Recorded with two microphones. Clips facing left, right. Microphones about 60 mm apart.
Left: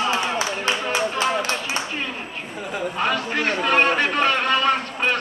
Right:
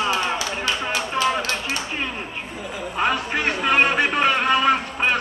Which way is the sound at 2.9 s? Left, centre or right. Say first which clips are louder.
Right 2 dB; centre.